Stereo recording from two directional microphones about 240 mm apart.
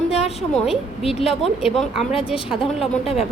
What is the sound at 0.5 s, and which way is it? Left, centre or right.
Speech, centre.